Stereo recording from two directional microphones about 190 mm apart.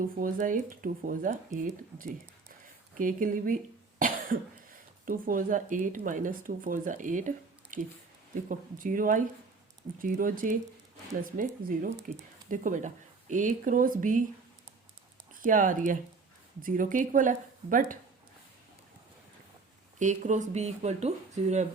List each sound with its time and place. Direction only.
0.0 s speech: 45° right (ahead or behind)
3.0 s speech: 45° right (ahead or behind)
15.4 s speech: 45° right (ahead or behind)
20.0 s speech: 40° right (ahead or behind)